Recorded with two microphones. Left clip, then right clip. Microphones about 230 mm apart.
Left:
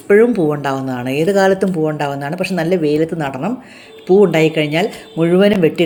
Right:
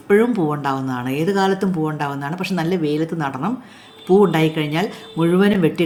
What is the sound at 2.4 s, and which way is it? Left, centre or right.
Speech, centre.